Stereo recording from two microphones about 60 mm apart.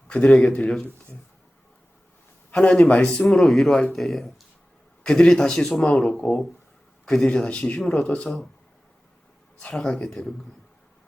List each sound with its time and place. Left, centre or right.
0.3 s a man's voice: centre
2.5 s a man's voice: centre
3.2 s a man's voice: centre
7.0 s a sound: centre
7.3 s speech: centre
7.8 s speech: centre
8.0 s a man's voice: centre
9.7 s a man's voice: centre